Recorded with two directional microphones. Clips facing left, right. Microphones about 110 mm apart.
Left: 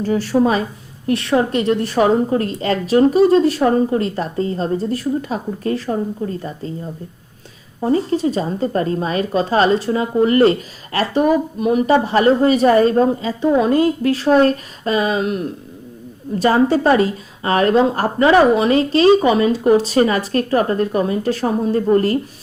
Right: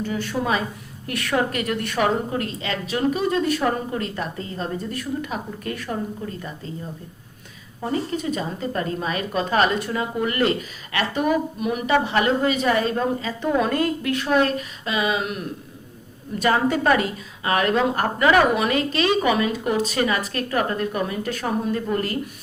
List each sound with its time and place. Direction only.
0.0 s a woman's voice: 40° left (ahead or behind)
7.8 s a woman's voice: 30° left (ahead or behind)
13.4 s a woman's voice: 20° left (ahead or behind)